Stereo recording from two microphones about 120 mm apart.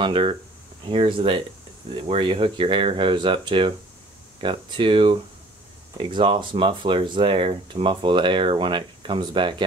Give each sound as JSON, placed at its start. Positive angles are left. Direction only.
{"t": 0.0, "sound": "speech", "side_deg": -45}